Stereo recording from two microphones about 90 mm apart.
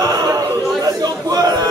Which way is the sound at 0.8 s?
45° right (ahead or behind).